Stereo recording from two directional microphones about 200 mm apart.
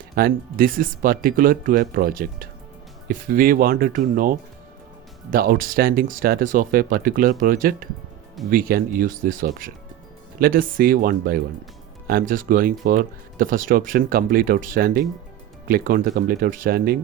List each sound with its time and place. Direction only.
0.2 s speech: 45° right (ahead or behind)
5.3 s speech: 45° right (ahead or behind)